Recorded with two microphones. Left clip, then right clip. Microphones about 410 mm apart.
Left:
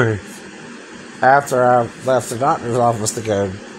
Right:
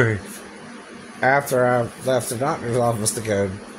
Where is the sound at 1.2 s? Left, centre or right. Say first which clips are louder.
Left 5 dB; right.